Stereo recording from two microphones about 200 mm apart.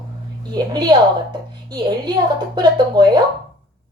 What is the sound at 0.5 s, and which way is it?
A woman's voice, 20° right (ahead or behind).